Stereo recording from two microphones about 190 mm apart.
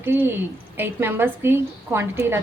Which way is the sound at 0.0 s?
10° right (ahead or behind).